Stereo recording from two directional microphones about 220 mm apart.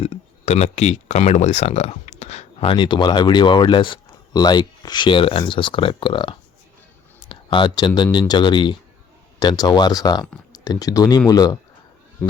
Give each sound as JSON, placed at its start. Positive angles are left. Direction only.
{"t": 0.0, "sound": "speech", "side_deg": 30}